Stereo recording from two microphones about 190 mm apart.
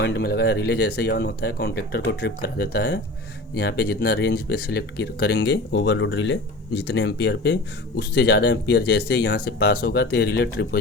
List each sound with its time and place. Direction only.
0.0 s speech: 60° left (ahead or behind)